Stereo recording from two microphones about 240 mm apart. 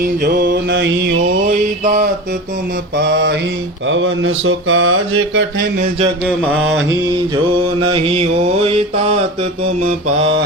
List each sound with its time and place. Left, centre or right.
0.0 s music: right
1.8 s mantra: right
3.0 s music: right
3.8 s mantra: right
7.8 s mantra: right